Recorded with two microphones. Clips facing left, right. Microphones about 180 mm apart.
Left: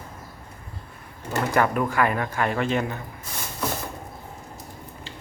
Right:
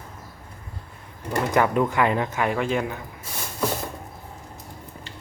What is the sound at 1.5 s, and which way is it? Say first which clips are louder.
Speech: right 2 dB; 20° right (ahead or behind).